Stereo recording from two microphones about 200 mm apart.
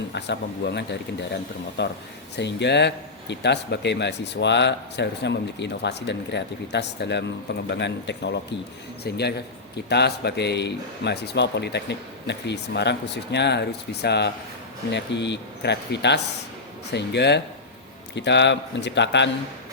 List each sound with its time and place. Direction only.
0.1 s speech: 60° left (ahead or behind)